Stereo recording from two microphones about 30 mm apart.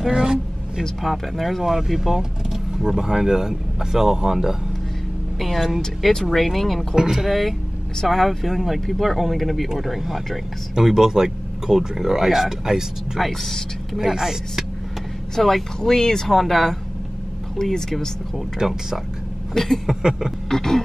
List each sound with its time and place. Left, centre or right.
0.1 s speech: right
1.0 s speech: centre
1.6 s speech: centre
6.3 s speech: centre
7.1 s speech: centre
10.7 s speech: centre
13.2 s speech: centre
13.9 s speech: centre
15.3 s speech: centre
16.3 s speech: centre
18.6 s speech: right
19.5 s speech: centre
20.0 s speech: right
20.4 s speech: centre